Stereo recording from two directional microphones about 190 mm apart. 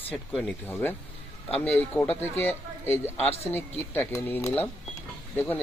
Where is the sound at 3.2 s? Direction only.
35° left (ahead or behind).